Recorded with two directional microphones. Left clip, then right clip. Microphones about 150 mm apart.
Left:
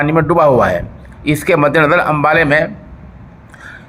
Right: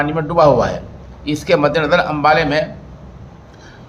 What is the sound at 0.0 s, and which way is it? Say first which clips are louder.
A man's voice: left 2 dB; 40° left (ahead or behind).